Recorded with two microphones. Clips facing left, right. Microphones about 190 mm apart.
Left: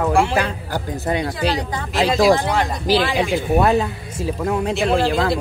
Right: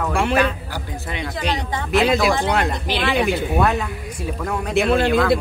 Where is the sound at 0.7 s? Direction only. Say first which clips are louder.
Left 7 dB; 40° left (ahead or behind).